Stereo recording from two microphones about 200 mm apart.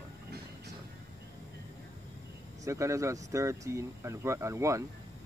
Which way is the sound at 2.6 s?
15° right (ahead or behind).